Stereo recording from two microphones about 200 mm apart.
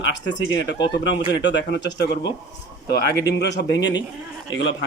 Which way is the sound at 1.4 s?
60° left (ahead or behind).